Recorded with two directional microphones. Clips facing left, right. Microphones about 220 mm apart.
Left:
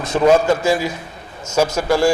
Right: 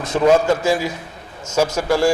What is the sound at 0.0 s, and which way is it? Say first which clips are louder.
Speech: left 1 dB; 30° left (ahead or behind).